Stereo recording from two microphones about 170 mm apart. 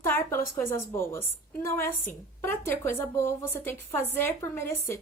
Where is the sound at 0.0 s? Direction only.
15° left (ahead or behind).